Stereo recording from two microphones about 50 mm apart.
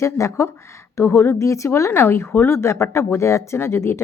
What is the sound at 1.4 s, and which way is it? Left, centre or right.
Speech, left.